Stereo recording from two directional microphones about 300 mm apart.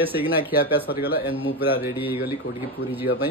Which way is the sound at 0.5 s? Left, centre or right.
Left.